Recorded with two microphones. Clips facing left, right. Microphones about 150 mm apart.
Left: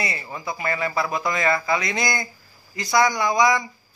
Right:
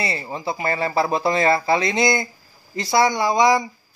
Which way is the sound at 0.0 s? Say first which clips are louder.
Right 4 dB; 30° right (ahead or behind).